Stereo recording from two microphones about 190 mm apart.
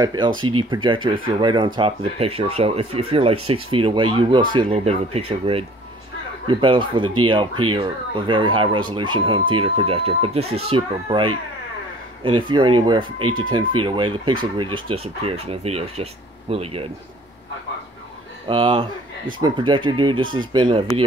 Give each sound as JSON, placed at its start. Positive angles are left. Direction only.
{"t": 0.0, "sound": "speech", "side_deg": -20}
{"t": 18.5, "sound": "speech", "side_deg": -25}